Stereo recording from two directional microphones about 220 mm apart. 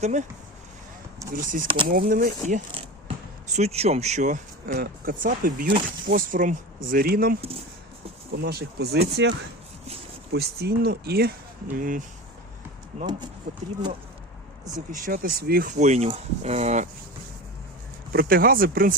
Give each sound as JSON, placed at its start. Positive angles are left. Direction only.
{"t": 0.0, "sound": "speech", "side_deg": -35}
{"t": 1.3, "sound": "speech", "side_deg": -40}
{"t": 1.6, "sound": "speech", "side_deg": -20}
{"t": 1.9, "sound": "speech", "side_deg": -40}
{"t": 3.1, "sound": "basketball bounce", "side_deg": -25}
{"t": 3.5, "sound": "speech", "side_deg": -30}
{"t": 8.4, "sound": "speech", "side_deg": -45}
{"t": 10.3, "sound": "speech", "side_deg": -45}
{"t": 13.1, "sound": "speech", "side_deg": -20}
{"t": 14.9, "sound": "speech", "side_deg": -40}
{"t": 18.1, "sound": "speech", "side_deg": -40}